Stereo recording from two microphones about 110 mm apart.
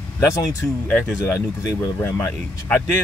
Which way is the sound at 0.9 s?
10° left (ahead or behind).